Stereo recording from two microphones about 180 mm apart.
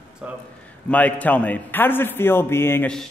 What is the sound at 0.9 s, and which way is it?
A man's voice, 10° left (ahead or behind).